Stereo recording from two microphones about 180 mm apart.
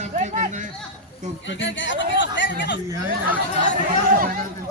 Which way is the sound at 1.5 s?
90° left.